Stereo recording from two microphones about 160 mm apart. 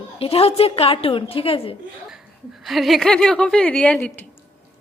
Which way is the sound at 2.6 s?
Centre (ahead or behind).